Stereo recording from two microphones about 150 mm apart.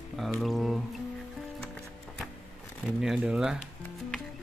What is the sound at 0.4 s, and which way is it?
Speech, centre (ahead or behind).